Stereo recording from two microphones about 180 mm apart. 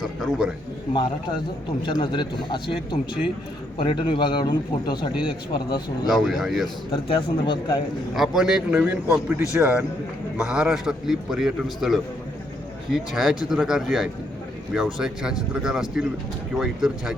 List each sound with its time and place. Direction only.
0.0 s a sound: centre (ahead or behind)
1.8 s a man's voice: 25° left (ahead or behind)
6.1 s a man's voice: centre (ahead or behind)
6.9 s a man's voice: 30° left (ahead or behind)
8.1 s a man's voice: centre (ahead or behind)